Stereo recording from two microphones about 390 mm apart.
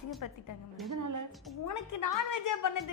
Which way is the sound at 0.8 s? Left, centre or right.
Right.